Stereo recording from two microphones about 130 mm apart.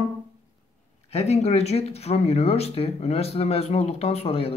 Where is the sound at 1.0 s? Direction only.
55° left (ahead or behind).